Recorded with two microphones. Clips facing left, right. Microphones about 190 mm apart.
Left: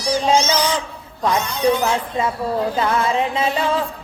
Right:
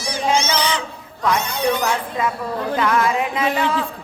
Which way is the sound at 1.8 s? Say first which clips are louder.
Left 1 dB; 25° left (ahead or behind).